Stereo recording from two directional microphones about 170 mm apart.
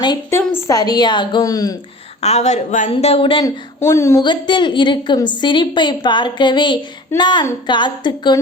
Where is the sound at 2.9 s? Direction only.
35° left (ahead or behind).